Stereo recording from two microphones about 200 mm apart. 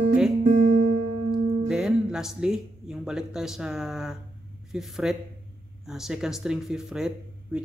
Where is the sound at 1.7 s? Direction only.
5° right (ahead or behind).